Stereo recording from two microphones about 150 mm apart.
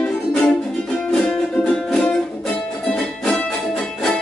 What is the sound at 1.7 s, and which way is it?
Music, 5° left (ahead or behind).